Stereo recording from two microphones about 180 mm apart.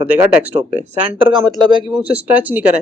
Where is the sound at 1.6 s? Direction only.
25° right (ahead or behind).